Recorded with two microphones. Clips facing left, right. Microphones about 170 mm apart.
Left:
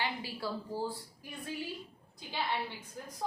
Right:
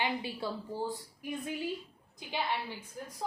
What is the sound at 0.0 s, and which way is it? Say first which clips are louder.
A woman's voice: right 3 dB; 20° right (ahead or behind).